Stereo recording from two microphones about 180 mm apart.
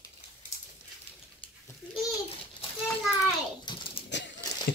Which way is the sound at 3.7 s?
30° left (ahead or behind).